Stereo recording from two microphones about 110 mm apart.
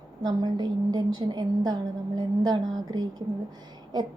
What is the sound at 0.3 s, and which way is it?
A woman's voice, 40° right (ahead or behind).